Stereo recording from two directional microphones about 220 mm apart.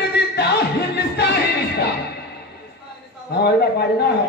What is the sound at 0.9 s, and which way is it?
Music, 50° left (ahead or behind).